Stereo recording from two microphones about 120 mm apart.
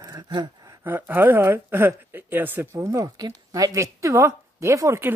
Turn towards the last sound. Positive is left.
turn(degrees=-20)  # may be behind; listen again after turning